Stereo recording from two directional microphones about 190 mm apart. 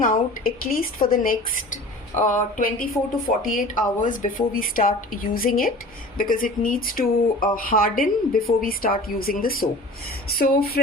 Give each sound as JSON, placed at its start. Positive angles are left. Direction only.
{"t": 0.0, "sound": "speech", "side_deg": 45}